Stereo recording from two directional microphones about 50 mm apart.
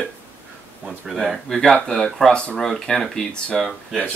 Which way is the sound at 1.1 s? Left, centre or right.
Centre.